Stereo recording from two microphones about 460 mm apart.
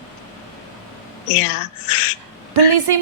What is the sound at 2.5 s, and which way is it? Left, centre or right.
Speech, right.